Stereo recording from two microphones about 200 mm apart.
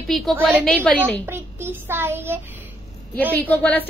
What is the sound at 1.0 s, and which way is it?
A child's voice, 10° right (ahead or behind).